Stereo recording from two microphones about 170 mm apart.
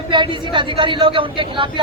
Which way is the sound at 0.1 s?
30° right (ahead or behind).